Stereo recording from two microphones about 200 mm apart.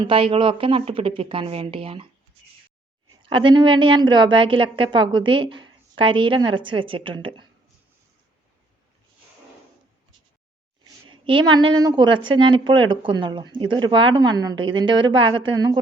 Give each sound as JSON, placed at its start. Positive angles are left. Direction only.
{"t": 0.0, "sound": "a woman's voice", "side_deg": -25}
{"t": 3.2, "sound": "a woman's voice", "side_deg": -25}
{"t": 11.1, "sound": "a woman's voice", "side_deg": -25}